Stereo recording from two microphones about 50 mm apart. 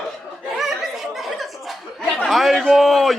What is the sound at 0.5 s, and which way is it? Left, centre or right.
Chuckle, centre.